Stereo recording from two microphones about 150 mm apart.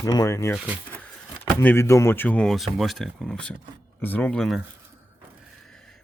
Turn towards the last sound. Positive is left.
turn(degrees=5)  # may be behind; listen again after turning